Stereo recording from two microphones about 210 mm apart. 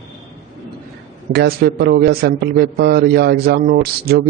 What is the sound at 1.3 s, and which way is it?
A man's voice, 50° right (ahead or behind).